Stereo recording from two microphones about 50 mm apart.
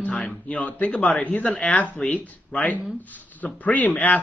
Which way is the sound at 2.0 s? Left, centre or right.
Centre.